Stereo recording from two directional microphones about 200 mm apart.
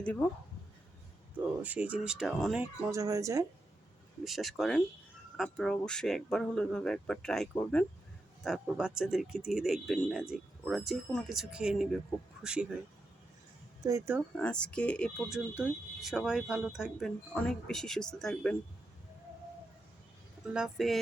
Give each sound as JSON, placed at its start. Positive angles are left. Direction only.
{"t": 0.0, "sound": "speech", "side_deg": 5}
{"t": 1.6, "sound": "speech", "side_deg": -5}
{"t": 2.9, "sound": "speech", "side_deg": -15}
{"t": 4.2, "sound": "speech", "side_deg": 0}
{"t": 8.4, "sound": "speech", "side_deg": 0}
{"t": 13.8, "sound": "speech", "side_deg": -15}
{"t": 14.3, "sound": "speech", "side_deg": 5}
{"t": 20.4, "sound": "speech", "side_deg": -5}